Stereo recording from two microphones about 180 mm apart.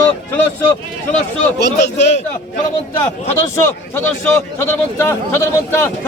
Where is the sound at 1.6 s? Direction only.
70° left (ahead or behind).